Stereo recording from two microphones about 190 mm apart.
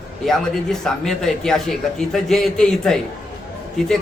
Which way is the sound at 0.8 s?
Centre (ahead or behind).